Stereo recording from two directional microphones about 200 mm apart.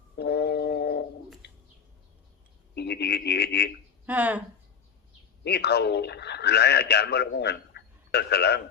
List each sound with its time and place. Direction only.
0.2 s a sound: 55° left (ahead or behind)
1.4 s bird: 55° left (ahead or behind)
2.7 s speech: 55° left (ahead or behind)
4.0 s speech: 10° right (ahead or behind)
5.4 s a man's voice: 55° left (ahead or behind)